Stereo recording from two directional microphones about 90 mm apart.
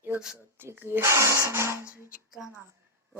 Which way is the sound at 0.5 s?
25° right (ahead or behind).